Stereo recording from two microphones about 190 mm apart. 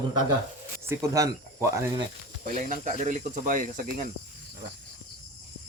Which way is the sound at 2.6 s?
40° right (ahead or behind).